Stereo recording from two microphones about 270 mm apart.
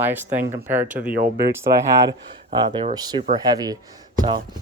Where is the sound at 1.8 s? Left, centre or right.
Centre.